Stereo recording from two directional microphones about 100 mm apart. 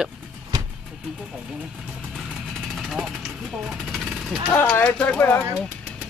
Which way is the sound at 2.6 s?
Centre (ahead or behind).